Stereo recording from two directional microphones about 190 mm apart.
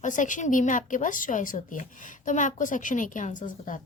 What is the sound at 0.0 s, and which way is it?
A woman's voice, 40° left (ahead or behind).